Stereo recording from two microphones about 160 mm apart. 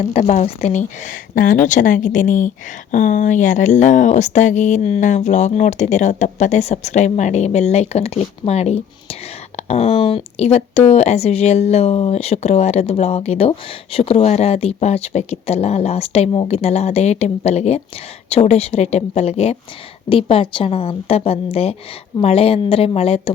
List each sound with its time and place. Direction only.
0.1 s speech: 45° left (ahead or behind)